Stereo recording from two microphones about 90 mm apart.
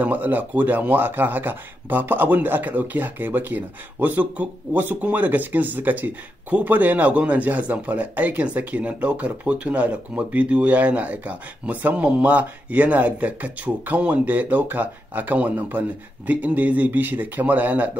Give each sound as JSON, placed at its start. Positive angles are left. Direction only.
{"t": 0.0, "sound": "speech", "side_deg": -20}